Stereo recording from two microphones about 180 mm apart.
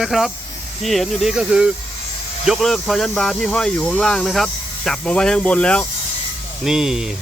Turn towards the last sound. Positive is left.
turn(degrees=-5)  # may be behind; listen again after turning